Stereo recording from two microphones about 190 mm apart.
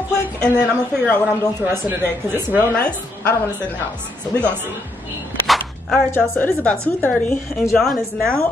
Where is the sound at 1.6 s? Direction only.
10° right (ahead or behind).